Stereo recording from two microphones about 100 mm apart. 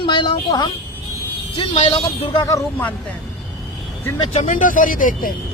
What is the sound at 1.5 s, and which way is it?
Speech, 60° left (ahead or behind).